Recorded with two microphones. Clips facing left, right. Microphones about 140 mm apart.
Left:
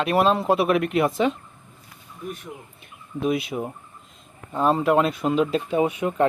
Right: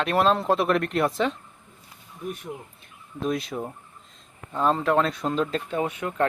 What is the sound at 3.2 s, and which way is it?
Speech, 5° left (ahead or behind).